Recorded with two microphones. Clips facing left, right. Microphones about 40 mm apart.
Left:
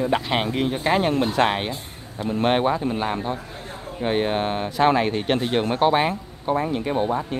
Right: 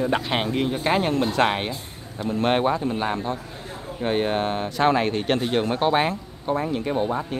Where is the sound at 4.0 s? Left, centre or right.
Centre.